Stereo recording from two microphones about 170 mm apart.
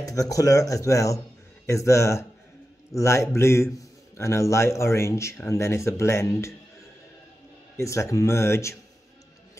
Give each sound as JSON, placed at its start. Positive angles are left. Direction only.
{"t": 0.0, "sound": "speech", "side_deg": 20}
{"t": 7.7, "sound": "speech", "side_deg": 15}